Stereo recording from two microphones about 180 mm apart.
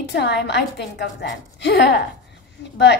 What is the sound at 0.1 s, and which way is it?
A woman's voice, 65° left (ahead or behind).